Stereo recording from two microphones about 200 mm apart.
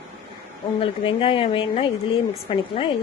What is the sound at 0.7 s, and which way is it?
A woman's voice, 25° left (ahead or behind).